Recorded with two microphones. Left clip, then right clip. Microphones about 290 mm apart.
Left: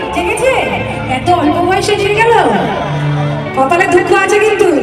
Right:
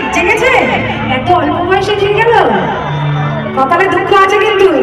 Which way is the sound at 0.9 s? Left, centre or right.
Centre.